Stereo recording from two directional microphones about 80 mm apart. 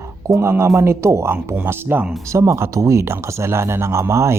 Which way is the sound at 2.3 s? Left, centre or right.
Right.